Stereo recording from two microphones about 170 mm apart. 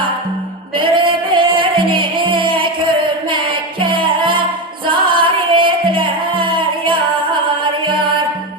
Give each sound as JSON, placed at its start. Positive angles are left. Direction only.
{"t": 0.8, "sound": "music", "side_deg": -30}